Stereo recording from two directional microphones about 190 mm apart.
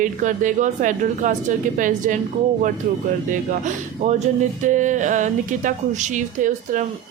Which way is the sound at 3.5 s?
40° right (ahead or behind).